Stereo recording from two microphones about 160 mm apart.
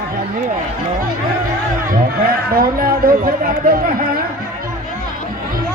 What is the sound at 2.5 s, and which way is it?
Speech, 65° right (ahead or behind).